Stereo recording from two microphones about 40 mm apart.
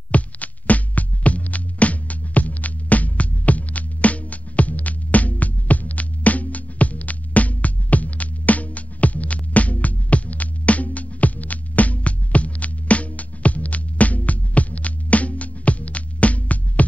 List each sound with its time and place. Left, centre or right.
0.1 s music: left